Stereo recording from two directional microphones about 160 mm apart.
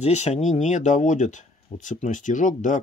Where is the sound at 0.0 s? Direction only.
45° left (ahead or behind).